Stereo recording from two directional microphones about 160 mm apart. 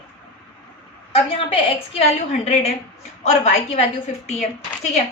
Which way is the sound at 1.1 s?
40° left (ahead or behind).